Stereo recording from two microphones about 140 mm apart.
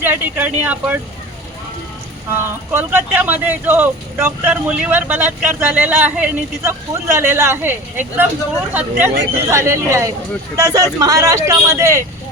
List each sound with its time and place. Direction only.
0.0 s speech: 15° right (ahead or behind)
2.3 s speech: 15° right (ahead or behind)